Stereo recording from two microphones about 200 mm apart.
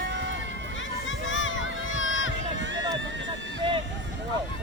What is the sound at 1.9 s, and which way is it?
Run, 75° left (ahead or behind).